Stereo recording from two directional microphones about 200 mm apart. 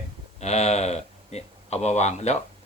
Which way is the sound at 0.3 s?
35° left (ahead or behind).